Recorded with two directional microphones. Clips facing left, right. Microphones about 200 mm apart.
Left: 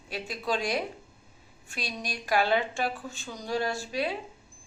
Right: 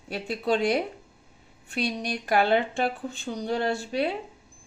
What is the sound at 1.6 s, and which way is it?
A woman's voice, 60° right (ahead or behind).